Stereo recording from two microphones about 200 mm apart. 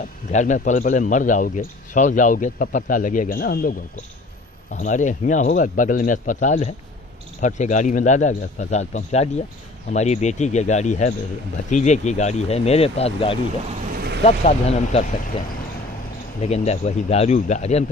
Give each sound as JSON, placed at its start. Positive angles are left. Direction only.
{"t": 0.3, "sound": "speech", "side_deg": 35}
{"t": 4.7, "sound": "speech", "side_deg": 40}